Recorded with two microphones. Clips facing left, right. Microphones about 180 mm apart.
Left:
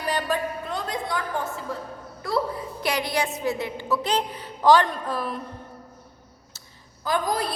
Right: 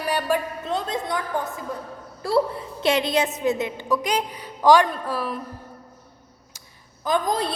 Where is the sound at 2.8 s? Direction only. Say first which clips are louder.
Right 5 dB; 25° right (ahead or behind); by 5.4 s 10° right (ahead or behind).